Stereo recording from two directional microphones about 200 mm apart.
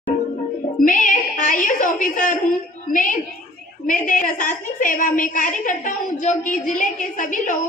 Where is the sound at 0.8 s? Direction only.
40° left (ahead or behind).